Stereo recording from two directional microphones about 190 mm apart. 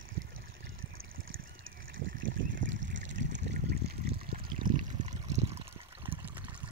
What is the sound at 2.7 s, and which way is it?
Trickle, 75° right (ahead or behind).